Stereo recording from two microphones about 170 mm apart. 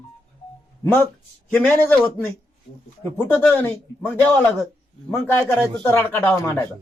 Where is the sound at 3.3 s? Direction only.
10° left (ahead or behind).